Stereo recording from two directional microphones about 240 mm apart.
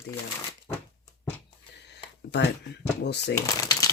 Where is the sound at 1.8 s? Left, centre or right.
Left.